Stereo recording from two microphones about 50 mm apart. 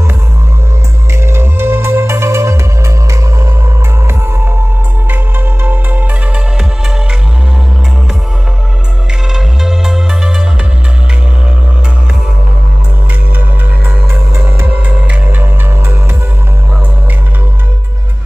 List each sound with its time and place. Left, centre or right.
1.2 s music: right
5.1 s music: right
9.3 s music: centre
14.3 s music: right
14.7 s pulse: right